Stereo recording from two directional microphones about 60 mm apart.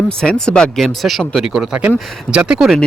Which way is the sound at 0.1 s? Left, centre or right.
Centre.